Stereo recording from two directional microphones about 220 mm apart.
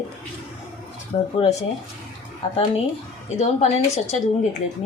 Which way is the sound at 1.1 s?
25° left (ahead or behind).